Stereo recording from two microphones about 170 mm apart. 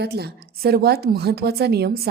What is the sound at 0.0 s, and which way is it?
A woman's voice, 70° right (ahead or behind).